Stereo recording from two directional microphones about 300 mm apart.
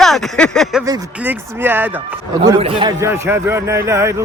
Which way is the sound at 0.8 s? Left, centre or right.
Centre.